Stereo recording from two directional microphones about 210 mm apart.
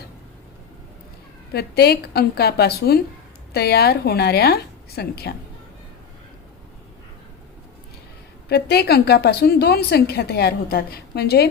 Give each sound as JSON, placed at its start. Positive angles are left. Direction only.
{"t": 1.5, "sound": "a woman's voice", "side_deg": 50}
{"t": 8.4, "sound": "a woman's voice", "side_deg": 50}